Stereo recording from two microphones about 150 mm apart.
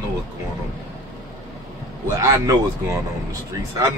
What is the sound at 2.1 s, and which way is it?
Speech, 20° right (ahead or behind).